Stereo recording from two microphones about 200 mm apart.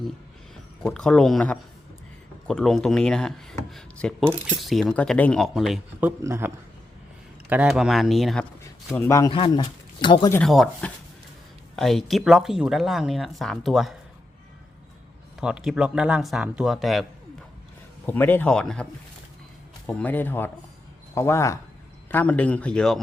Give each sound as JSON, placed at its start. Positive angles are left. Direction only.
{"t": 0.8, "sound": "speech", "side_deg": 5}
{"t": 7.5, "sound": "speech", "side_deg": -5}
{"t": 9.0, "sound": "speech", "side_deg": 15}
{"t": 9.3, "sound": "speech", "side_deg": 25}
{"t": 10.3, "sound": "speech", "side_deg": 0}
{"t": 15.4, "sound": "speech", "side_deg": -5}
{"t": 18.0, "sound": "speech", "side_deg": 10}
{"t": 19.9, "sound": "speech", "side_deg": 10}